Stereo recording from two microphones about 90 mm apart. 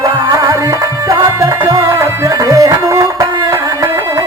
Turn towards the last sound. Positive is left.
turn(degrees=-35)  # may be behind; listen again after turning